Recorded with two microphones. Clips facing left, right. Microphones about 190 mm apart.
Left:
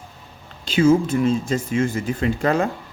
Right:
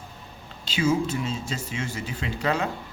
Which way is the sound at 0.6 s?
50° left (ahead or behind).